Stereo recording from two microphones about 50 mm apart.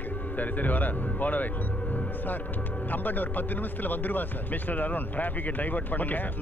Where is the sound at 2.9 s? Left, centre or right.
Left.